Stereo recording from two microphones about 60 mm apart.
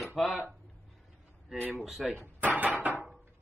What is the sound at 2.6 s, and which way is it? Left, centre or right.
Dishes, right.